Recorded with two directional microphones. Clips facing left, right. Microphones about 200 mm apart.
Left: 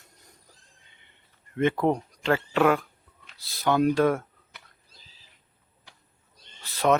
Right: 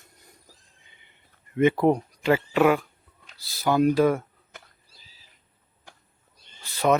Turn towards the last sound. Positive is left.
turn(degrees=0)  # may be behind; listen again after turning